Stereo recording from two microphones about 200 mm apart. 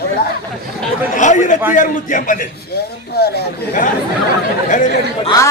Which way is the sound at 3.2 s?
55° left (ahead or behind).